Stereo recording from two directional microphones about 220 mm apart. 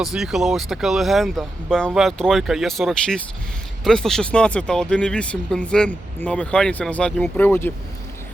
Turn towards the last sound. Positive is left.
turn(degrees=10)  # may be behind; listen again after turning